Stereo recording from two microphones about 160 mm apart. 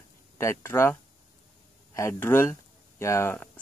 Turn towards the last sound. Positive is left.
turn(degrees=15)  # may be behind; listen again after turning